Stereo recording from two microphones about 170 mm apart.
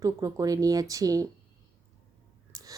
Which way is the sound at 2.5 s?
20° right (ahead or behind).